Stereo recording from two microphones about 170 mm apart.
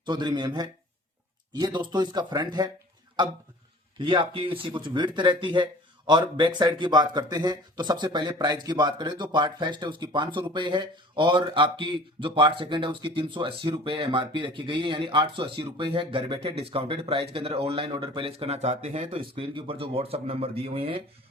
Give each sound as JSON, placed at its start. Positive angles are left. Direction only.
{"t": 0.0, "sound": "speech", "side_deg": -25}
{"t": 3.9, "sound": "speech", "side_deg": -30}